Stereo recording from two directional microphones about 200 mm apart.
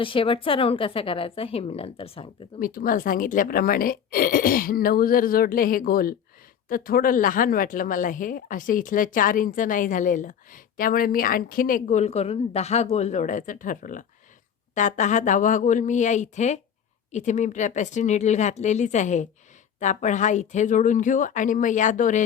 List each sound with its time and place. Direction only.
0.0 s speech: 25° left (ahead or behind)
2.6 s speech: 45° left (ahead or behind)